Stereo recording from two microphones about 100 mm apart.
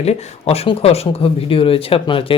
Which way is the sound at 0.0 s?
90° left.